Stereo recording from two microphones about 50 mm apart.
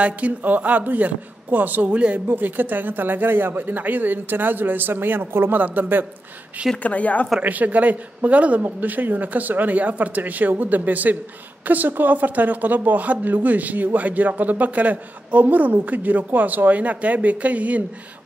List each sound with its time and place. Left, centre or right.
0.0 s speech: right
2.2 s speech: right
6.8 s speech: left
7.4 s speech: right